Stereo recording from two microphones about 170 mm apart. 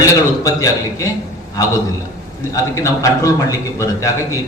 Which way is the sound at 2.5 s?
20° left (ahead or behind).